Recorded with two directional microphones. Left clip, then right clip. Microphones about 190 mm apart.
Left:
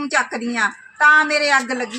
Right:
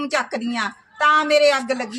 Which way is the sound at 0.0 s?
35° right (ahead or behind).